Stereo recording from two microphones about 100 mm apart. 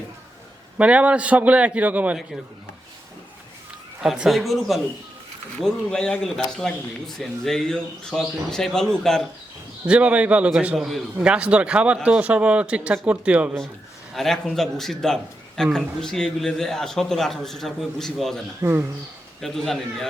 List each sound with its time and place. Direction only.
0.8 s speech: 10° right (ahead or behind)
4.0 s a man's voice: 5° right (ahead or behind)
9.8 s speech: 15° right (ahead or behind)
14.1 s a man's voice: 5° left (ahead or behind)
18.6 s speech: 20° right (ahead or behind)
19.4 s a man's voice: 5° left (ahead or behind)